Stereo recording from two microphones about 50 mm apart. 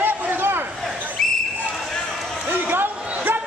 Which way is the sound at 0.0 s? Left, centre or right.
Right.